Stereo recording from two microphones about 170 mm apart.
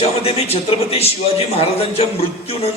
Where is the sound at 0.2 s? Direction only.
35° left (ahead or behind).